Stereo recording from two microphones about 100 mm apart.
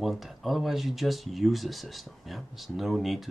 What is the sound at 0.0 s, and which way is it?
Speech, centre (ahead or behind).